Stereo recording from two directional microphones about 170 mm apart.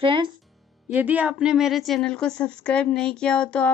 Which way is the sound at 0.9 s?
10° right (ahead or behind).